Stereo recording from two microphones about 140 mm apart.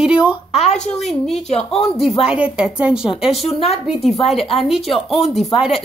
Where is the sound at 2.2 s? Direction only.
10° right (ahead or behind).